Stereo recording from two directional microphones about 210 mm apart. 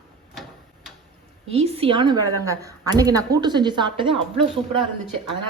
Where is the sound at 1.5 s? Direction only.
30° right (ahead or behind).